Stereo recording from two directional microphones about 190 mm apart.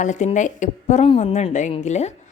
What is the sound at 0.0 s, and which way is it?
A woman's voice, 40° left (ahead or behind).